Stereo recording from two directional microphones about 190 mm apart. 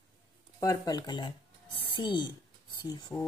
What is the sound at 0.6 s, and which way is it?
Speech, 20° left (ahead or behind).